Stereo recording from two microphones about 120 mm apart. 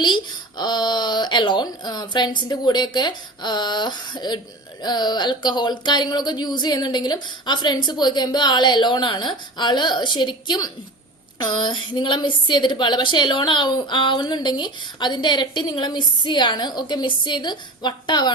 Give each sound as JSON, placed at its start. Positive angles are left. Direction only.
{"t": 0.0, "sound": "a woman's voice", "side_deg": 40}